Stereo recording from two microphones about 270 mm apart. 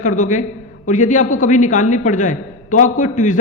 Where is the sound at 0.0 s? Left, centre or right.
Left.